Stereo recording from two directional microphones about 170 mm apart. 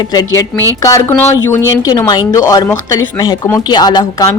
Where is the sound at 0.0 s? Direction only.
20° left (ahead or behind).